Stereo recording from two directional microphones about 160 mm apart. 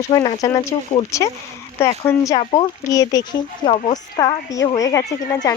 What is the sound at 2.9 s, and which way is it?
Speech, 20° left (ahead or behind).